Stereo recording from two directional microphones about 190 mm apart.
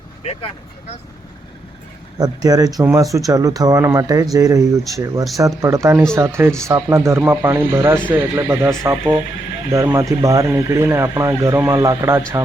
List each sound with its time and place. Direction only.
0.2 s speech: 35° left (ahead or behind)
2.1 s speech: 20° right (ahead or behind)